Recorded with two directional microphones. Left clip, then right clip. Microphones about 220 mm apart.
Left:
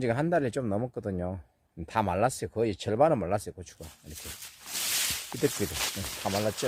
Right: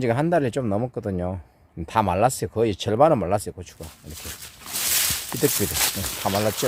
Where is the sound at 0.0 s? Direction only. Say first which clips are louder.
Right 6 dB; 10° left (ahead or behind).